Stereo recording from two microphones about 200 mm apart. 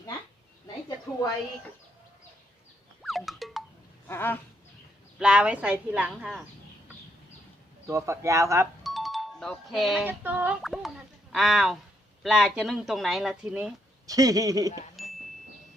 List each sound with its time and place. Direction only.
3.0 s music: centre (ahead or behind)
4.1 s a sound: 10° left (ahead or behind)
5.2 s speech: 5° right (ahead or behind)
7.9 s speech: 15° right (ahead or behind)
8.8 s speech: centre (ahead or behind)
14.1 s speech: 15° right (ahead or behind)
15.0 s chime: centre (ahead or behind)